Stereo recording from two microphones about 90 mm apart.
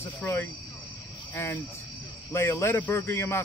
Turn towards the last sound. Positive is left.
turn(degrees=25)  # may be behind; listen again after turning